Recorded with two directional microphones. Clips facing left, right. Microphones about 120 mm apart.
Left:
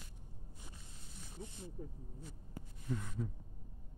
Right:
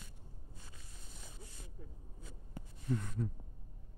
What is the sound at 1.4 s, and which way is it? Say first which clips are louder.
Snake: left 12 dB; 25° left (ahead or behind).